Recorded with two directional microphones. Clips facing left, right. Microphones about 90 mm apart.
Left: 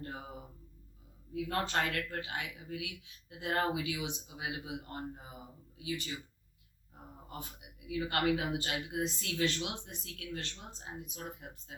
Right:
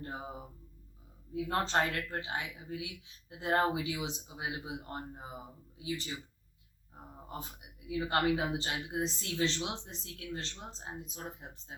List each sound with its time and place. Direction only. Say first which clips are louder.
1.3 s speech: right 2 dB; 25° right (ahead or behind)
7.9 s speech: right 1 dB; 25° right (ahead or behind)